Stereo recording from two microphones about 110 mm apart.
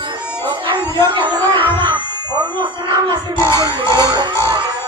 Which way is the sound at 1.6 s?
20° left (ahead or behind).